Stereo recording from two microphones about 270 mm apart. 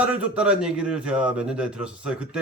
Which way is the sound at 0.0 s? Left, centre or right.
Centre.